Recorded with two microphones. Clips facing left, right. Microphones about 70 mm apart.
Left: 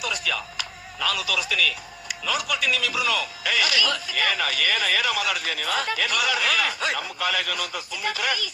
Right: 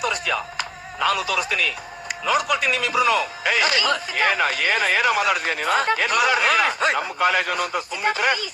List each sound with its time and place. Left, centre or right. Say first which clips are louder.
0.0 s speech: right 5 dB; right